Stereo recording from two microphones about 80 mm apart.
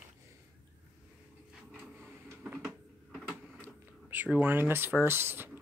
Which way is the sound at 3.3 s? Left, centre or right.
Right.